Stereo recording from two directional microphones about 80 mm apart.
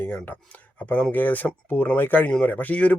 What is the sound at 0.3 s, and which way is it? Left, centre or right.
Speech, left.